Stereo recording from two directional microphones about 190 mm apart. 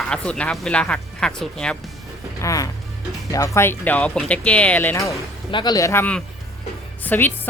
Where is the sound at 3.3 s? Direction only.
15° left (ahead or behind).